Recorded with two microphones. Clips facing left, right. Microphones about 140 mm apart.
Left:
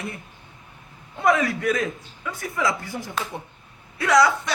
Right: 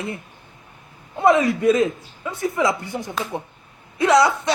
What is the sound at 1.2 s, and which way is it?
Speech, 25° right (ahead or behind).